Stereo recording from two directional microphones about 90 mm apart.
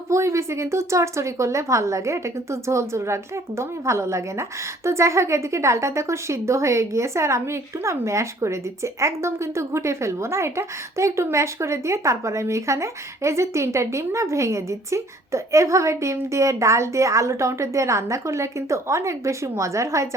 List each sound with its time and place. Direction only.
0.1 s a woman's voice: 30° right (ahead or behind)